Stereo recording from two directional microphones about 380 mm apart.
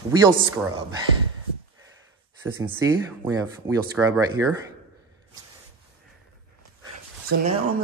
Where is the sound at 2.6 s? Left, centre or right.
Centre.